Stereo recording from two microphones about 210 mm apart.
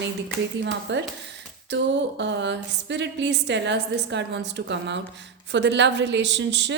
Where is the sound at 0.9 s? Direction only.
60° right (ahead or behind).